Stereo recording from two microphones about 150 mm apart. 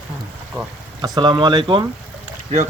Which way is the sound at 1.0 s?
25° right (ahead or behind).